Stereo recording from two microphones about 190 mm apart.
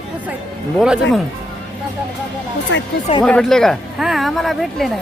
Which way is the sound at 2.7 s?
70° left (ahead or behind).